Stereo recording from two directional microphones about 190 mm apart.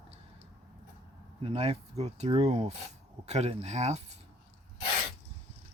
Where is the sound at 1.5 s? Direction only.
30° right (ahead or behind).